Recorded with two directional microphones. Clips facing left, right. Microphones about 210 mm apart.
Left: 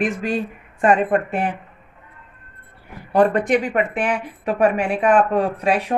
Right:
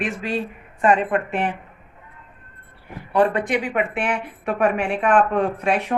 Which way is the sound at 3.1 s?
40° left (ahead or behind).